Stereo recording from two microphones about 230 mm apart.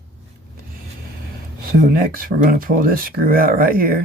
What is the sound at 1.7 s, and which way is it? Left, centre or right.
Speech, right.